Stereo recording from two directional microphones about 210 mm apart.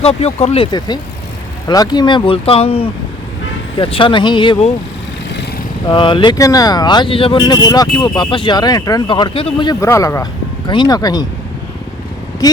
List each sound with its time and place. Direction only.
0.0 s speech: 30° left (ahead or behind)
5.9 s speech: 25° left (ahead or behind)
12.4 s speech: 15° left (ahead or behind)